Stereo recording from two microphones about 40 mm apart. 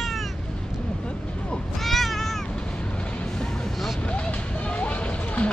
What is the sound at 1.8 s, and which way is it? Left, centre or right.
Cat, centre.